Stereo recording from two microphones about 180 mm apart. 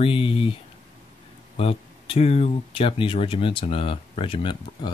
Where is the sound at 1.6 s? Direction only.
30° left (ahead or behind).